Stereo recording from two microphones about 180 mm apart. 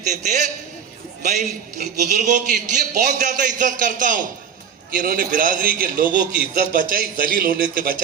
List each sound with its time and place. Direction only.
0.2 s a man's voice: 45° right (ahead or behind)
1.8 s a man's voice: 40° right (ahead or behind)